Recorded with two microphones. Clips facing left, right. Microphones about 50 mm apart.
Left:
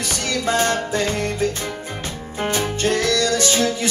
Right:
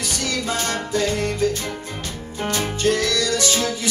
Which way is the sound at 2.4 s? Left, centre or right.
Left.